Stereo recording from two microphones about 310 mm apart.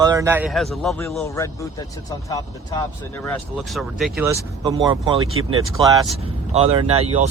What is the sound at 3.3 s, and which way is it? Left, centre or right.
Speech, centre.